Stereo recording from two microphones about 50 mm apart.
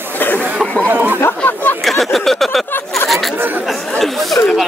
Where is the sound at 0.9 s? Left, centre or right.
Right.